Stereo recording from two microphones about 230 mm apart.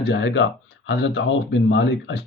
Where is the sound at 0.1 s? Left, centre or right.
Left.